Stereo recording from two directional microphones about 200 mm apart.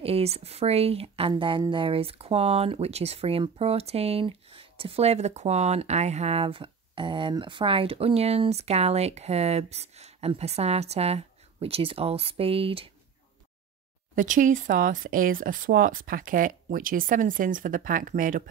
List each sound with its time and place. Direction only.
0.0 s speech: 30° right (ahead or behind)
14.1 s speech: 40° right (ahead or behind)